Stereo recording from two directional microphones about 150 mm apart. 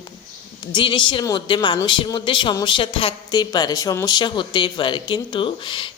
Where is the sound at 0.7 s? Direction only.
35° left (ahead or behind).